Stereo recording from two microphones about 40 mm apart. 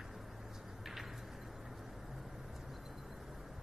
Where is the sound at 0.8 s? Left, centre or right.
Centre.